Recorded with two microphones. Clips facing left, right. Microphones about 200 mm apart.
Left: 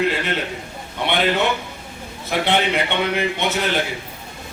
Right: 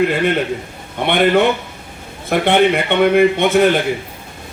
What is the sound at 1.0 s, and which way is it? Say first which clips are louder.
Speech: right 4 dB; 55° right (ahead or behind).